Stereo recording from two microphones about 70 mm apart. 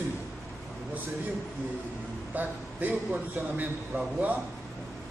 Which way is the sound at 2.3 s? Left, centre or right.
Right.